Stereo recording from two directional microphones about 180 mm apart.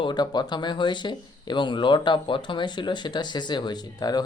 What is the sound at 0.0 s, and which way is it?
Speech, 25° left (ahead or behind).